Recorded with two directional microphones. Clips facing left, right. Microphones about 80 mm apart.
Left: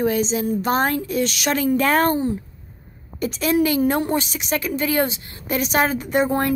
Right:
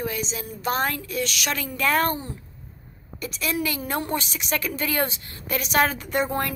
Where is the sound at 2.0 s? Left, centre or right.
Left.